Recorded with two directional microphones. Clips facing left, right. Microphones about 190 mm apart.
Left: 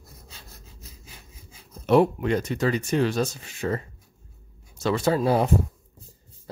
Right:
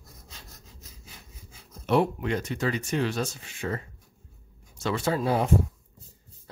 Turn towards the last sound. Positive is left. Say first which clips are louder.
# left 4 dB
turn(degrees=35)  # may be behind; listen again after turning